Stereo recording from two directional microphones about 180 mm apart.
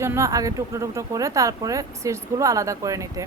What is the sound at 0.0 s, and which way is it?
A woman's voice, 15° right (ahead or behind).